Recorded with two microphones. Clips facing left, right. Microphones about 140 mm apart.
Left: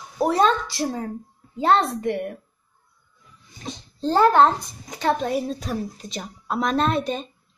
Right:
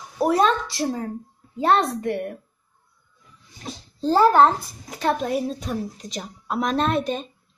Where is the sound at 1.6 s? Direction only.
30° left (ahead or behind).